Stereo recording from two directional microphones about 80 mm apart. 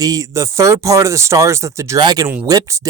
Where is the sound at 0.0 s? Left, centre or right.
Right.